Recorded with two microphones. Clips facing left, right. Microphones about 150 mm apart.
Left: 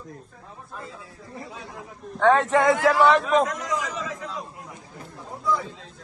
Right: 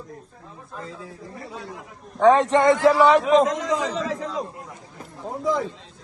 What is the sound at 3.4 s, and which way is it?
Speech, 25° right (ahead or behind).